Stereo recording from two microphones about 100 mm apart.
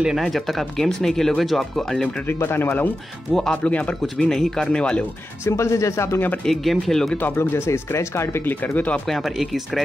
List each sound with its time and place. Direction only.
0.0 s speech: centre (ahead or behind)
2.2 s speech: 20° left (ahead or behind)
3.3 s speech: 10° left (ahead or behind)
5.4 s speech: 30° left (ahead or behind)
6.4 s speech: centre (ahead or behind)
7.2 s speech: 20° left (ahead or behind)
9.0 s speech: centre (ahead or behind)